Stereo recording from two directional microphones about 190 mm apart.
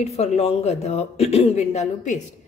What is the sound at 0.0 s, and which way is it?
A man's voice, 35° left (ahead or behind).